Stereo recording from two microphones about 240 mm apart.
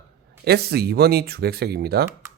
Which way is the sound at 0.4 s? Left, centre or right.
Right.